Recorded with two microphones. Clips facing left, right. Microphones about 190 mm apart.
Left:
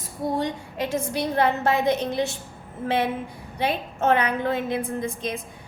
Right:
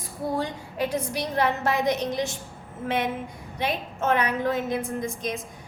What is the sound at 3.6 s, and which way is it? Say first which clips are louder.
A woman's voice: left 3 dB; 30° left (ahead or behind).